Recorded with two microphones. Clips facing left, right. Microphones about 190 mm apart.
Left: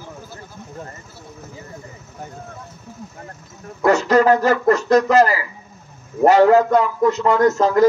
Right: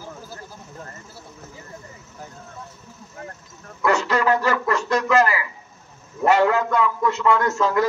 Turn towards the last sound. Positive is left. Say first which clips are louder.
# left 7 dB
turn(degrees=40)  # may be behind; listen again after turning